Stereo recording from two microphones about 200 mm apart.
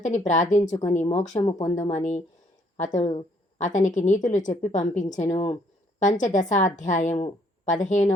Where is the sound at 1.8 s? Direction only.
35° left (ahead or behind).